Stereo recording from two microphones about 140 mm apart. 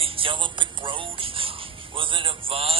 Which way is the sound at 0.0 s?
40° right (ahead or behind).